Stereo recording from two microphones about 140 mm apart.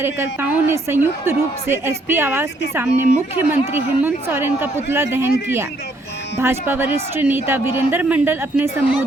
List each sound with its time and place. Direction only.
0.0 s a woman's voice: 15° right (ahead or behind)
6.4 s a woman's voice: 15° right (ahead or behind)